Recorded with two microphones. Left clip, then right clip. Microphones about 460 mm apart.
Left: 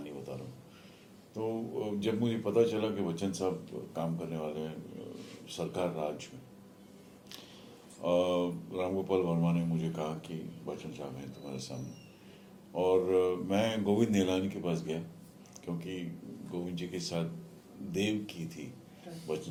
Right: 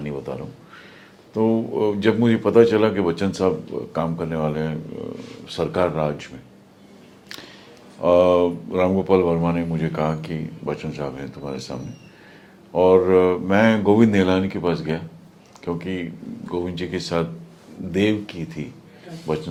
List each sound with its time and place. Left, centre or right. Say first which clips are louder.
1.4 s a man's voice: right 15 dB; right
8.0 s a man's voice: right 14 dB; right
12.7 s a man's voice: right 13 dB; right